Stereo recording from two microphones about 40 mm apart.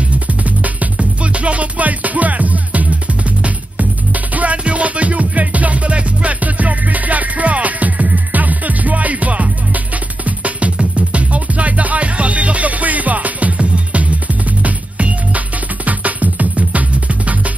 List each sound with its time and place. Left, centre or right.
0.3 s music: right